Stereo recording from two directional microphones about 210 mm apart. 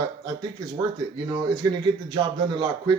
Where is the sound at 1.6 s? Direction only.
20° right (ahead or behind).